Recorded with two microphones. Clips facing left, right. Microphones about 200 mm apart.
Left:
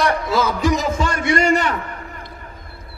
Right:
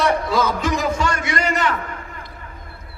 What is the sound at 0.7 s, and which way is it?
Speech, 20° left (ahead or behind).